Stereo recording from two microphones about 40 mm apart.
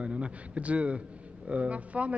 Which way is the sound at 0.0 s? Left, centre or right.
Right.